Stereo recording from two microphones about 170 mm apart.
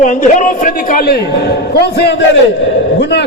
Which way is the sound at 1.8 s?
70° left (ahead or behind).